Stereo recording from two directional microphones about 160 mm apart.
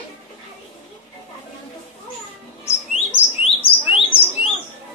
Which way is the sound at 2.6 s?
40° left (ahead or behind).